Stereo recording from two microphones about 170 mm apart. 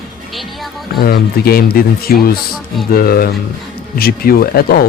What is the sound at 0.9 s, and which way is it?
Speech, 65° left (ahead or behind).